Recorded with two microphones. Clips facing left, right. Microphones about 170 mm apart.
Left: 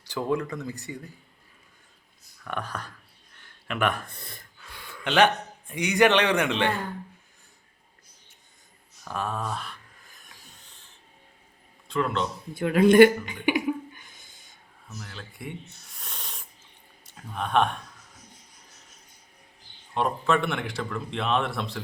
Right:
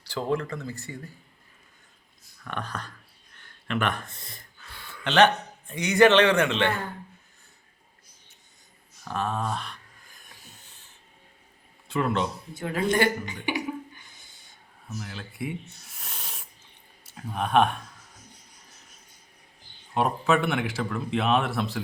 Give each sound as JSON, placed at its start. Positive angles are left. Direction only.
{"t": 0.0, "sound": "speech", "side_deg": 15}
{"t": 2.4, "sound": "speech", "side_deg": 5}
{"t": 9.4, "sound": "speech", "side_deg": 5}
{"t": 11.9, "sound": "speech", "side_deg": -5}
{"t": 12.5, "sound": "speech", "side_deg": 60}
{"t": 13.4, "sound": "cough", "side_deg": 50}
{"t": 15.0, "sound": "speech", "side_deg": -5}
{"t": 19.9, "sound": "speech", "side_deg": -5}